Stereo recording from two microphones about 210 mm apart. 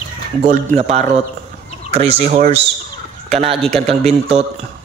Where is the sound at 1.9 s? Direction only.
30° right (ahead or behind).